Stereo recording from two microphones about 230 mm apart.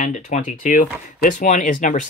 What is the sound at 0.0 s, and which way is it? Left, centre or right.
Speech, left.